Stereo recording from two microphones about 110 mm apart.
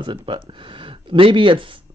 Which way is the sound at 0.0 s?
50° right (ahead or behind).